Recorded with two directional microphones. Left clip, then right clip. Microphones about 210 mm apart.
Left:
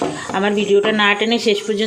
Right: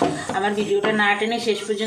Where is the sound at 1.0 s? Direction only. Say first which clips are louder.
Left 4 dB; 50° left (ahead or behind).